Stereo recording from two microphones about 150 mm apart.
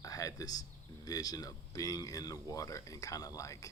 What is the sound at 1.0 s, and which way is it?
Speech, 25° left (ahead or behind).